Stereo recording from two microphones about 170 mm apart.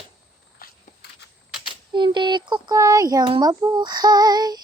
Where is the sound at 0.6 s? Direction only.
75° left (ahead or behind).